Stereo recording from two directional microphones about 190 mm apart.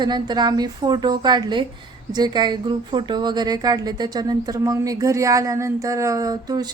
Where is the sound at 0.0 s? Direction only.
20° right (ahead or behind).